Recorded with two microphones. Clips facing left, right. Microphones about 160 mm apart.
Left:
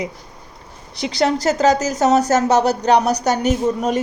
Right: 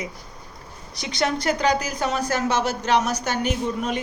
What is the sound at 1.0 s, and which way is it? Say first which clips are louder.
Speech: left 6 dB; 30° left (ahead or behind).